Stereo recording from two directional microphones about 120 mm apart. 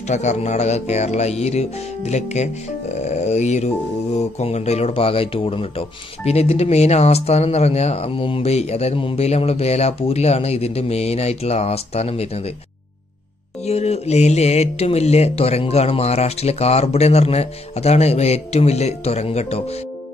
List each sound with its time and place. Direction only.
0.0 s speech: 75° left (ahead or behind)
13.7 s speech: 60° left (ahead or behind)